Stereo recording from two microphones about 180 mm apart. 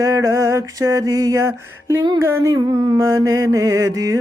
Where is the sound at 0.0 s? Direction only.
20° right (ahead or behind).